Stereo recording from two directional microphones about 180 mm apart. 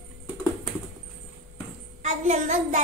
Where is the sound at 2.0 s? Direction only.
40° right (ahead or behind).